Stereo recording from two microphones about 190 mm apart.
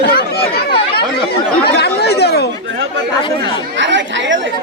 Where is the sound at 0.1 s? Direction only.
55° left (ahead or behind).